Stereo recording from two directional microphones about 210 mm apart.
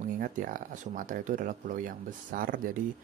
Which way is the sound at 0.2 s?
40° right (ahead or behind).